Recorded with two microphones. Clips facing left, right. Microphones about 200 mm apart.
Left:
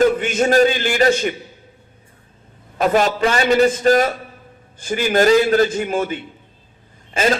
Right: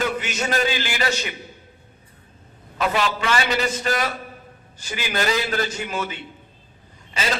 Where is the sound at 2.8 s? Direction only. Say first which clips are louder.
Left 7 dB; 45° left (ahead or behind).